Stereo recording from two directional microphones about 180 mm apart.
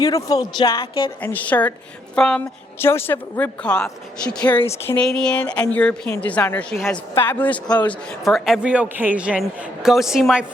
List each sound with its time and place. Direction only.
0.0 s speech: 20° left (ahead or behind)
1.2 s a woman's voice: 10° left (ahead or behind)